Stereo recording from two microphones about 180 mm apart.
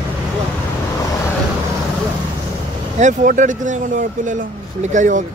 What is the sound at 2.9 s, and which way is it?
Speech, 45° right (ahead or behind).